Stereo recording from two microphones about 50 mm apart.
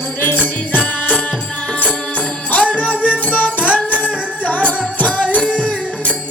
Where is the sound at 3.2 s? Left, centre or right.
Left.